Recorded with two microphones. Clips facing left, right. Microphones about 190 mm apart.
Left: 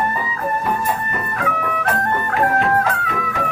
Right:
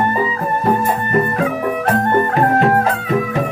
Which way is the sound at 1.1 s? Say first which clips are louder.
Right 7 dB; 30° right (ahead or behind).